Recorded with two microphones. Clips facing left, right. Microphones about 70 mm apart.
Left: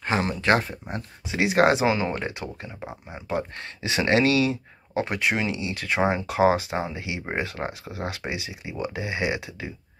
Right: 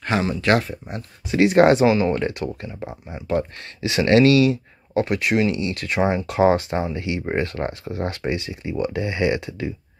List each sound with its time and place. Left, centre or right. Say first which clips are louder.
0.4 s speech: right 2 dB; left
1.3 s speech: right 7 dB; centre
1.9 s speech: right 6 dB; left